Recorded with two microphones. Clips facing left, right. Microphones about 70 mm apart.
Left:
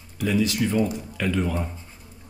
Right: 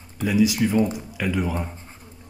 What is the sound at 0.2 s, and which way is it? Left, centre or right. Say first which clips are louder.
Speech: right 3 dB; centre.